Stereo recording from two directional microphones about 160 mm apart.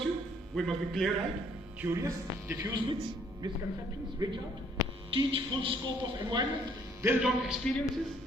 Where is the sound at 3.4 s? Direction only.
25° right (ahead or behind).